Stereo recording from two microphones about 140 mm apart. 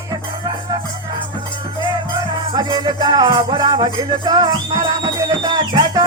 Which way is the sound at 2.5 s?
30° right (ahead or behind).